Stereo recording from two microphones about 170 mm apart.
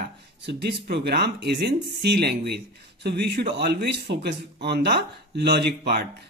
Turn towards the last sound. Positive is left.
turn(degrees=-70)  # may be behind; listen again after turning